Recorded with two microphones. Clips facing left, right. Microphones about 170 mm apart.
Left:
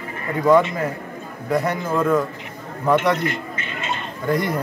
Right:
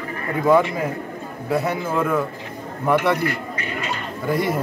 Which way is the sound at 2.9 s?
20° left (ahead or behind).